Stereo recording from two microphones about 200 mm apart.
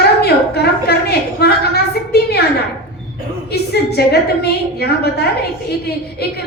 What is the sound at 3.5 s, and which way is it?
A woman's voice, 55° left (ahead or behind).